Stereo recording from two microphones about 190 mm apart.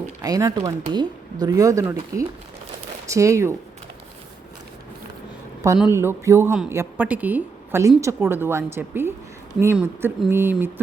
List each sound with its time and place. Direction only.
0.2 s a woman's voice: 20° right (ahead or behind)
5.8 s a woman's voice: 10° right (ahead or behind)